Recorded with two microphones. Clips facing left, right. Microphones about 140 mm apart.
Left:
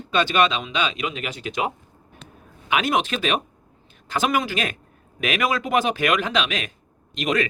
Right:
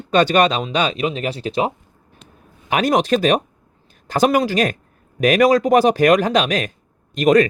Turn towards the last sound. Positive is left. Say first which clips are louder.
# right 10 dB
turn(degrees=-45)  # may be behind; listen again after turning